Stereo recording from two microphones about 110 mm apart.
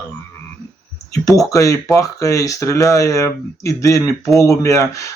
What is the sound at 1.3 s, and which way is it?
Speech, 30° left (ahead or behind).